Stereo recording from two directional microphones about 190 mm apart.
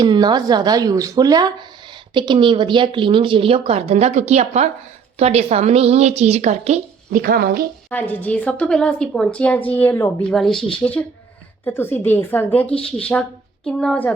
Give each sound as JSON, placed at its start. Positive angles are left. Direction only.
{"t": 0.0, "sound": "speech", "side_deg": -20}
{"t": 7.9, "sound": "a woman's voice", "side_deg": 10}